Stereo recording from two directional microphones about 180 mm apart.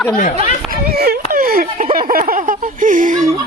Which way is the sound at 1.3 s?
55° right (ahead or behind).